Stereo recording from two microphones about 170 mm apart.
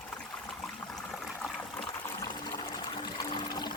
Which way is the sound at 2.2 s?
25° left (ahead or behind).